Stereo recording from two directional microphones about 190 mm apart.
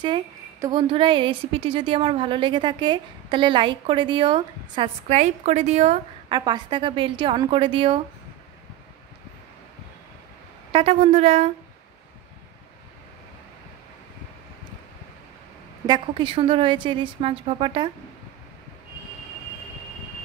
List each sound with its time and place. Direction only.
0.0 s a woman's voice: 25° right (ahead or behind)
10.7 s speech: 30° right (ahead or behind)
15.9 s a woman's voice: 25° right (ahead or behind)